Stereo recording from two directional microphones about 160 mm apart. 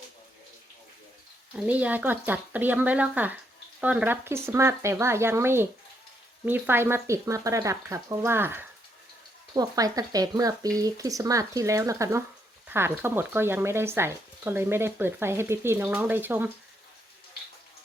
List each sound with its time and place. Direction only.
1.5 s speech: 10° right (ahead or behind)